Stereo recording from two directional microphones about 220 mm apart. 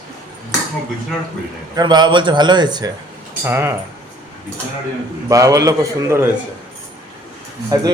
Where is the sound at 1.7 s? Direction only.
20° right (ahead or behind).